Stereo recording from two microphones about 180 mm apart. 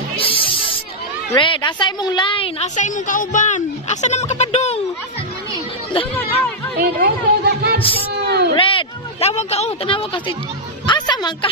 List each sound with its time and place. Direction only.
0.2 s a sound: 30° left (ahead or behind)
1.3 s a woman's voice: 25° left (ahead or behind)
6.8 s a woman's voice: 60° right (ahead or behind)
8.5 s a woman's voice: 30° left (ahead or behind)
10.9 s music: 25° left (ahead or behind)